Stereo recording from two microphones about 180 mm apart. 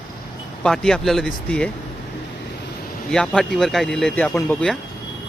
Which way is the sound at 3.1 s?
5° left (ahead or behind).